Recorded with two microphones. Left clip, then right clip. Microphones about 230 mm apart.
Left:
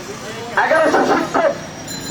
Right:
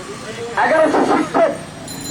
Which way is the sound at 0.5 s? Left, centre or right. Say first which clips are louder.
Even; left.